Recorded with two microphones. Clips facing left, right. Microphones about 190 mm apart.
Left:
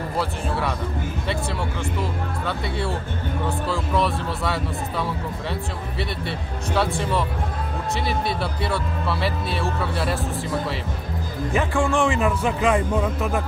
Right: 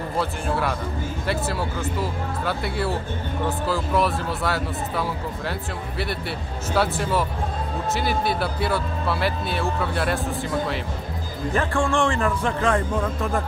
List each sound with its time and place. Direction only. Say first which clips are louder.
0.2 s speech: right 1 dB; centre (ahead or behind)
2.4 s speech: right 2 dB; centre (ahead or behind)
6.7 s speech: even; centre (ahead or behind)
11.5 s speech: left 1 dB; 5° left (ahead or behind)